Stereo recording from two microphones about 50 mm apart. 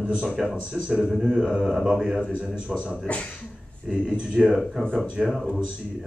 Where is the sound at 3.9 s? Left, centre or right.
Centre.